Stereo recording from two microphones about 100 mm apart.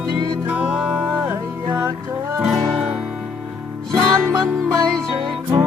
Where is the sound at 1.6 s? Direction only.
35° right (ahead or behind).